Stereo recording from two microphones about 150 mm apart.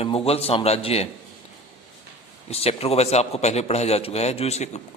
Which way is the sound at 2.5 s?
40° left (ahead or behind).